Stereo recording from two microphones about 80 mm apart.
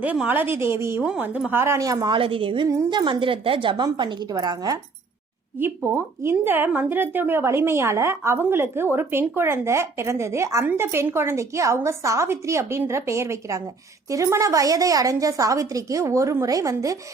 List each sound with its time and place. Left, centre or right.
0.0 s a woman's voice: centre; by 2.0 s right
2.0 s a woman's voice: right
4.3 s a woman's voice: right
5.5 s a woman's voice: right